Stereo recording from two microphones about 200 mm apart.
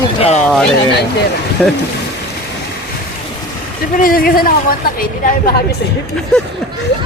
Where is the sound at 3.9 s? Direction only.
45° left (ahead or behind).